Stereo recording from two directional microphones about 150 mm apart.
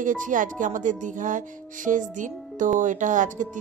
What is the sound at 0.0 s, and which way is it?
Speech, 60° right (ahead or behind).